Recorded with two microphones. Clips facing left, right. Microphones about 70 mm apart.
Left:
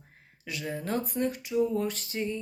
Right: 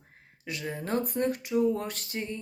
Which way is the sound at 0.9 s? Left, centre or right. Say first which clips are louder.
Right 3 dB; right.